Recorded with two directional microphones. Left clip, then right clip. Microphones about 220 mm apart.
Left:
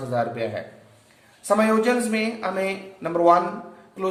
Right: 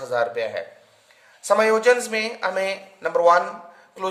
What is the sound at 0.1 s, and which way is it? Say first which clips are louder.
Speech: right 2 dB; 50° right (ahead or behind).